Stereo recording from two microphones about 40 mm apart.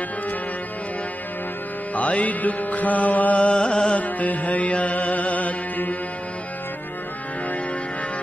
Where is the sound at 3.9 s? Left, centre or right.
Left.